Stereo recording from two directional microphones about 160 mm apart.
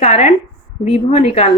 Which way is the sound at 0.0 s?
45° left (ahead or behind).